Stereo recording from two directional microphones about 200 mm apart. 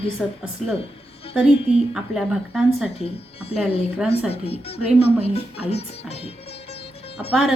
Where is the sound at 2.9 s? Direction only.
30° left (ahead or behind).